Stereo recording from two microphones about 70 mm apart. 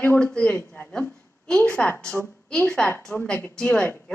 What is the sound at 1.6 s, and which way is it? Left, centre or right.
Speech, left.